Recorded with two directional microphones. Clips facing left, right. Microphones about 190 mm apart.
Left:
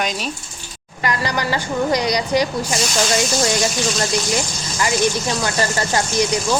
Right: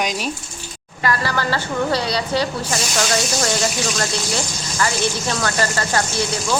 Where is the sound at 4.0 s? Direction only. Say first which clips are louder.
Left 3 dB; 15° left (ahead or behind).